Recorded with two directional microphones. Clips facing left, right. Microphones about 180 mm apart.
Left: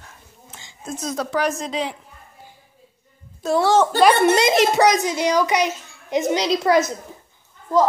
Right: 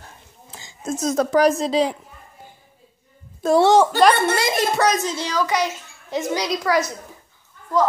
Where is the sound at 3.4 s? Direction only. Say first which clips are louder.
Right 3 dB; 55° right (ahead or behind).